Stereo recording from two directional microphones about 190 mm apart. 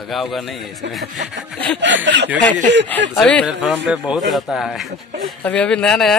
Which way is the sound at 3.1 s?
5° left (ahead or behind).